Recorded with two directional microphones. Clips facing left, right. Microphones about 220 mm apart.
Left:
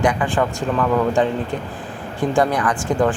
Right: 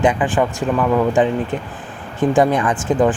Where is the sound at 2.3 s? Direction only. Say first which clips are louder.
Right 3 dB; 20° right (ahead or behind).